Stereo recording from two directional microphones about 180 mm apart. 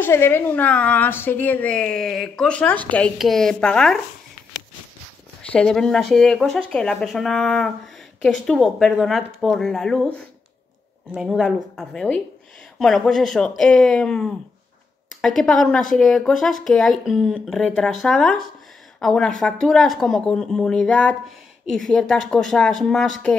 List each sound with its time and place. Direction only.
0.0 s a woman's voice: 15° left (ahead or behind)
5.5 s speech: 5° left (ahead or behind)